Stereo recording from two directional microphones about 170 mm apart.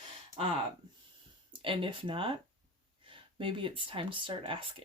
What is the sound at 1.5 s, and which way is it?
Speech, 30° right (ahead or behind).